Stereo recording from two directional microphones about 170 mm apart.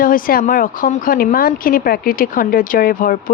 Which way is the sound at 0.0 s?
55° left (ahead or behind).